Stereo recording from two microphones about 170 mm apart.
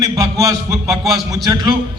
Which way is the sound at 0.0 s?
20° right (ahead or behind).